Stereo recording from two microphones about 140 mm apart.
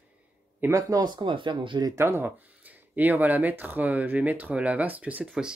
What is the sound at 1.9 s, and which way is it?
Speech, 15° right (ahead or behind).